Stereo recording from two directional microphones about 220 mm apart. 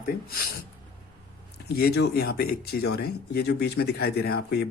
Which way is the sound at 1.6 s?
45° left (ahead or behind).